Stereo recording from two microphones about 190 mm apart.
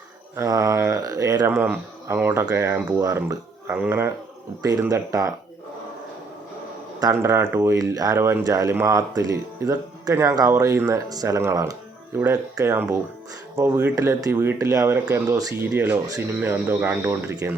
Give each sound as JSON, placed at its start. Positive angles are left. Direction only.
{"t": 0.3, "sound": "speech", "side_deg": -15}
{"t": 7.0, "sound": "speech", "side_deg": -15}